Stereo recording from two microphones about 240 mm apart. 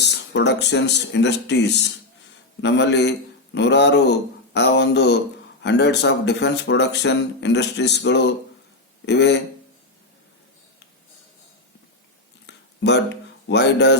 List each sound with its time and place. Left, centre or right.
0.0 s speech: left
12.5 s a sound: left
13.5 s speech: left